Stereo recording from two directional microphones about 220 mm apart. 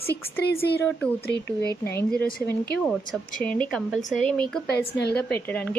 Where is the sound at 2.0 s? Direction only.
10° left (ahead or behind).